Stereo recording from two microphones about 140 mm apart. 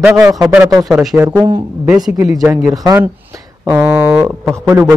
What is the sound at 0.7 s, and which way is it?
Speech, centre (ahead or behind).